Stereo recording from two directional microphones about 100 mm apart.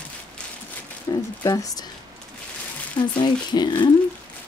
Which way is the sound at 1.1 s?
40° left (ahead or behind).